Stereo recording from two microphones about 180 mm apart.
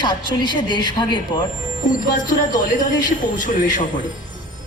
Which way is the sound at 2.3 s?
45° left (ahead or behind).